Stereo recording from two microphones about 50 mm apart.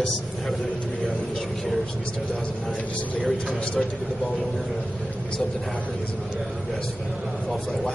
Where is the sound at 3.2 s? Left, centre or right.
Centre.